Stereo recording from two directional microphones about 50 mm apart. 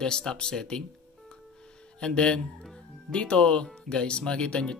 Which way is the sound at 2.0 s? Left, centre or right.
Centre.